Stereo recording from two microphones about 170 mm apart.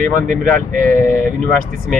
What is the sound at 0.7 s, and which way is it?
Speech, 50° right (ahead or behind).